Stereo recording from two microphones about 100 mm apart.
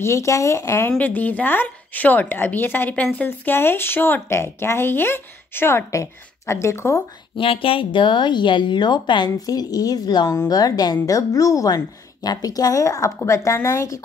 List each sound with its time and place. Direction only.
0.0 s speech: 30° left (ahead or behind)
0.9 s a woman's voice: 15° left (ahead or behind)
7.3 s a woman's voice: 65° left (ahead or behind); by 14.0 s 35° left (ahead or behind)